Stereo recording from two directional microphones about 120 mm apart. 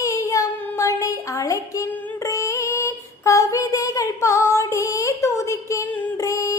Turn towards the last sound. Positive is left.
turn(degrees=25)  # may be behind; listen again after turning